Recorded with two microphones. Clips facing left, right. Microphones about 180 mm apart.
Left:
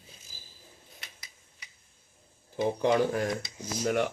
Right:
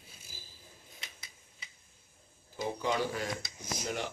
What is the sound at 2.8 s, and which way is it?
Speech, 55° left (ahead or behind).